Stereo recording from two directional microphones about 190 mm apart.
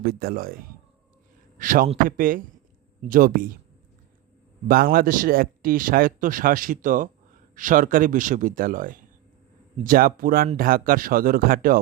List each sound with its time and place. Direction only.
0.0 s a man's voice: 50° right (ahead or behind)
4.7 s speech: 50° right (ahead or behind)